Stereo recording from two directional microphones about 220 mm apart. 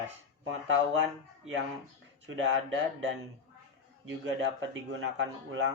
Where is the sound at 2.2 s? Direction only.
60° right (ahead or behind).